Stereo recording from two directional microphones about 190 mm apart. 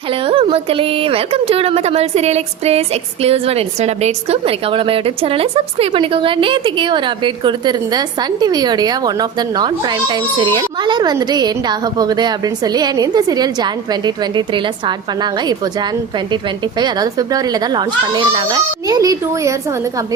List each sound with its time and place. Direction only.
0.1 s a woman's voice: 30° right (ahead or behind)